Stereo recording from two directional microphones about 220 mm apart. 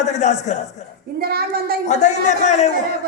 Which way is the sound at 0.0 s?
30° left (ahead or behind).